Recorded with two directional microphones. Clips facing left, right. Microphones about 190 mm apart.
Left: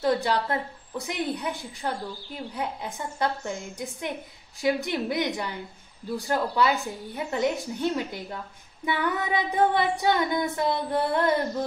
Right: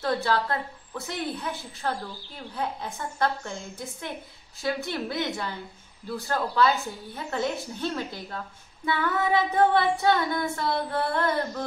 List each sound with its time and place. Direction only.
0.0 s a woman's voice: 15° left (ahead or behind)